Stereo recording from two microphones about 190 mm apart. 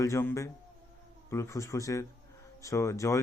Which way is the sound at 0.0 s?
15° left (ahead or behind).